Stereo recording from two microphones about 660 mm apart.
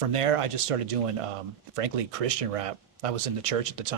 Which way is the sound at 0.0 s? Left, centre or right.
Right.